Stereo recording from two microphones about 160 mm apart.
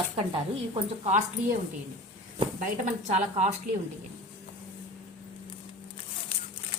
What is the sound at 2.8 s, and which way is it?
Speech, 45° right (ahead or behind).